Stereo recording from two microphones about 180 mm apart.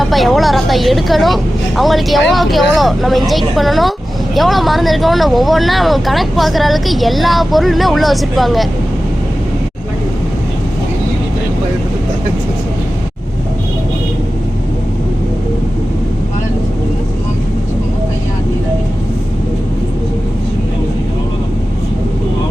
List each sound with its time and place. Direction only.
0.0 s speech: centre (ahead or behind)